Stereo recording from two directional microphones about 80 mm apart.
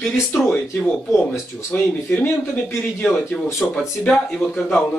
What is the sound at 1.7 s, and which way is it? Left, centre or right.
Speech, centre.